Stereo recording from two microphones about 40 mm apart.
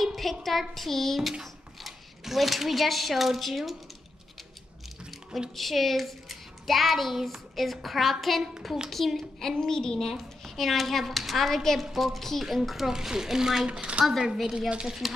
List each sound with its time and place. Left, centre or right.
0.0 s a child's voice: centre
5.6 s a child's voice: centre
10.0 s a child's voice: centre
13.7 s a woman's voice: right
14.2 s a woman's voice: centre
14.9 s a child's voice: centre